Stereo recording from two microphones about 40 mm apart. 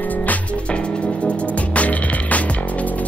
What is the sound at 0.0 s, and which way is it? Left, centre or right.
Music, left.